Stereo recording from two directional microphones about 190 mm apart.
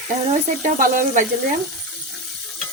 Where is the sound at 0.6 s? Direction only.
45° right (ahead or behind).